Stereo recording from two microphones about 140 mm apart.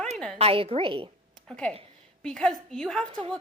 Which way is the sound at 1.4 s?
5° left (ahead or behind).